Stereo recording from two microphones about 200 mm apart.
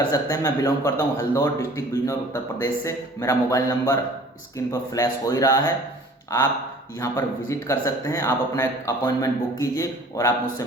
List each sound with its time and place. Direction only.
0.1 s a man's voice: 15° left (ahead or behind)
7.0 s a man's voice: 15° left (ahead or behind)